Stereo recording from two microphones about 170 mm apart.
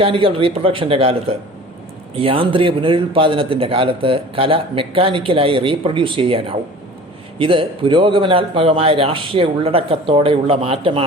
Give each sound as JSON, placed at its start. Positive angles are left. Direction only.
{"t": 0.0, "sound": "speech", "side_deg": -30}